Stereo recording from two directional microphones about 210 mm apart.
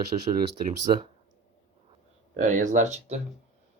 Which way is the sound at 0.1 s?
30° right (ahead or behind).